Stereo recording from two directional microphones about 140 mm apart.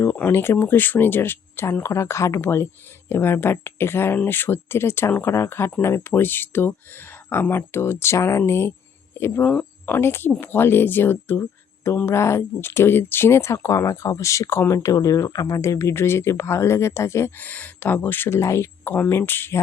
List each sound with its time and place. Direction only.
0.0 s speech: 15° left (ahead or behind)